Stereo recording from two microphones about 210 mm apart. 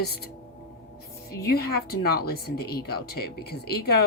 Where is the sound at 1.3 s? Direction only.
50° left (ahead or behind).